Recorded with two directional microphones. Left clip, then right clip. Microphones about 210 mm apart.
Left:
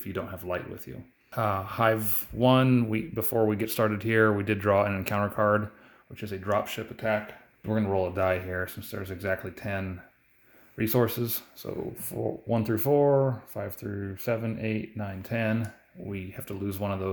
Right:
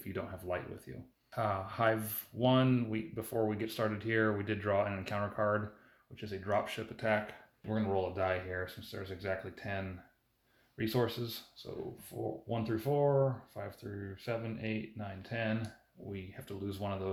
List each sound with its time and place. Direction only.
0.0 s speech: 30° left (ahead or behind)
6.9 s speech: 15° left (ahead or behind)
7.7 s speech: 55° left (ahead or behind)